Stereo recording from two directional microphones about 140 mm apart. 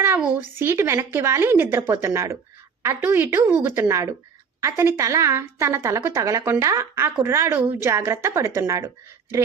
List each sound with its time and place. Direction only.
0.6 s a woman's voice: 15° right (ahead or behind)